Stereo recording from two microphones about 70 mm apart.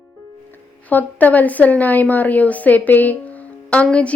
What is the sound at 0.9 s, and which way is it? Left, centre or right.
Speech, left.